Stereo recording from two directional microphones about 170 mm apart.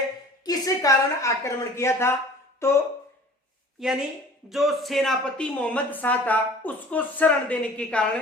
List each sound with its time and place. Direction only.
0.4 s a woman's voice: 20° left (ahead or behind)
3.8 s a woman's voice: centre (ahead or behind)